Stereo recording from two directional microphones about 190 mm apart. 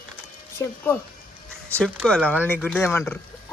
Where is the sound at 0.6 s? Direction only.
15° left (ahead or behind).